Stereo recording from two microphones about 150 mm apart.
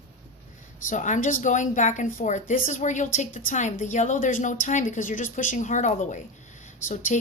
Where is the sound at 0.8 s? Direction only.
55° left (ahead or behind).